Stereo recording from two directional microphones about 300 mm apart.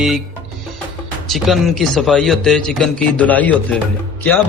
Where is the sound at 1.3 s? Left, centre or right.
Centre.